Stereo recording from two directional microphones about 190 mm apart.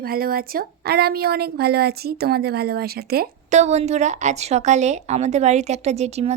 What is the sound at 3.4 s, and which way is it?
A woman's voice, 35° right (ahead or behind).